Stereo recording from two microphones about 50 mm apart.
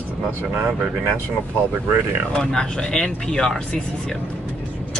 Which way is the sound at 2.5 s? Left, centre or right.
Centre.